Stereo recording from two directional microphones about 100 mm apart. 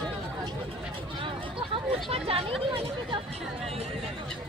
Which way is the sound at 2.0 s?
75° right (ahead or behind).